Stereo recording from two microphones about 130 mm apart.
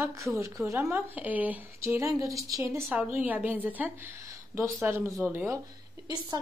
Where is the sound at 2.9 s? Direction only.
10° right (ahead or behind).